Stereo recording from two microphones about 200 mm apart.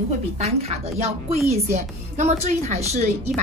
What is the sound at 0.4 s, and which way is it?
A woman's voice, 30° right (ahead or behind).